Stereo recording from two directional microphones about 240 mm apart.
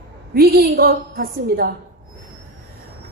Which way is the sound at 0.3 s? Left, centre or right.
Right.